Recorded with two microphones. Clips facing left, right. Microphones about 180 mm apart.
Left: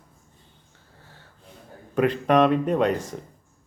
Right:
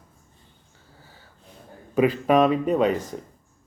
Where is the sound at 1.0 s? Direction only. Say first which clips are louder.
Left 1 dB; centre (ahead or behind).